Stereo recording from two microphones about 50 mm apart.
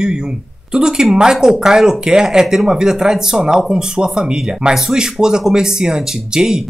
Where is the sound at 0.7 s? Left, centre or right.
Centre.